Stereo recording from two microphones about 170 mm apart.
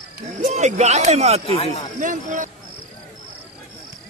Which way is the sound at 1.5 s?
35° left (ahead or behind).